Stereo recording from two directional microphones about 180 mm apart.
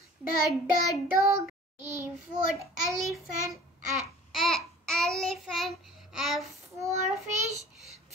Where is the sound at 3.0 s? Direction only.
Centre (ahead or behind).